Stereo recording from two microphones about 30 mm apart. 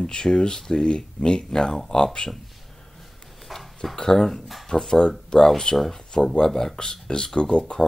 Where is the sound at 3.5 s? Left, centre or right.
Centre.